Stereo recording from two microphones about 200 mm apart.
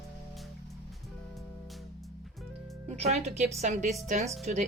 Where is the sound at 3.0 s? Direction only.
30° right (ahead or behind).